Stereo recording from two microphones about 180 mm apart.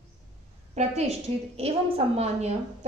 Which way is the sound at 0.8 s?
40° right (ahead or behind).